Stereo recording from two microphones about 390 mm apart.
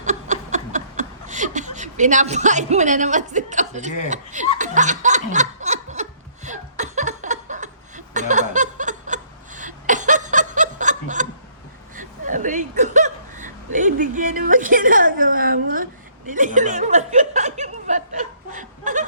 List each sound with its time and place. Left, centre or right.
0.0 s a sound: centre
4.1 s laughter: centre
11.9 s chuckle: centre